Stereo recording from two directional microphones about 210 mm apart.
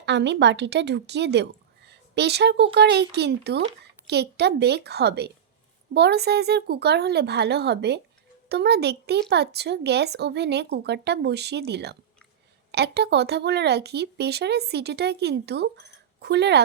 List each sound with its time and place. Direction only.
0.0 s a woman's voice: 55° right (ahead or behind)